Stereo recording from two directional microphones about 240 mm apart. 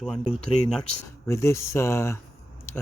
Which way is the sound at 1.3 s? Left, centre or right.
Centre.